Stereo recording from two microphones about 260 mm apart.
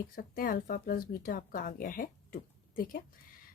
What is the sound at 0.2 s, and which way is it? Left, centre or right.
Speech, left.